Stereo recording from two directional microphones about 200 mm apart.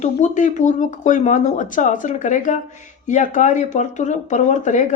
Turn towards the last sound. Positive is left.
turn(degrees=40)  # may be behind; listen again after turning